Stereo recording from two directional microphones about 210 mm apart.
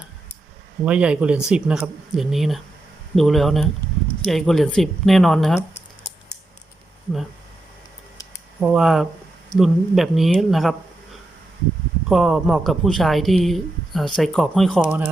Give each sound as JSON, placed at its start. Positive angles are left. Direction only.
{"t": 0.9, "sound": "speech", "side_deg": -5}
{"t": 8.6, "sound": "speech", "side_deg": 0}
{"t": 12.0, "sound": "speech", "side_deg": 0}